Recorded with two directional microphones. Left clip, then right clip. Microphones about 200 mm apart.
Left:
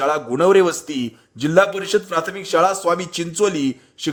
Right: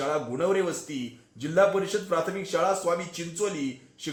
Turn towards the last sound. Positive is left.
turn(degrees=45)  # may be behind; listen again after turning